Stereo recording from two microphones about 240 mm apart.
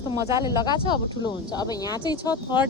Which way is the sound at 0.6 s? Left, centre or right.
Centre.